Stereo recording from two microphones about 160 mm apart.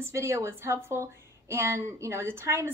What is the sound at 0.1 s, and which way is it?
A woman's voice, 15° right (ahead or behind).